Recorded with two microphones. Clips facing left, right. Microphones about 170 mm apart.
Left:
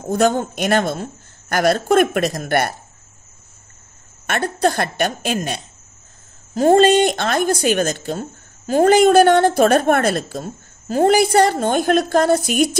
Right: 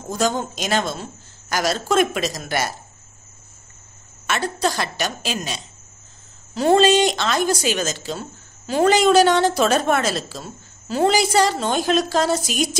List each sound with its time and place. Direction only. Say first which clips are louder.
0.0 s speech: left 5 dB; 55° left (ahead or behind)
4.3 s speech: left 4 dB; 55° left (ahead or behind)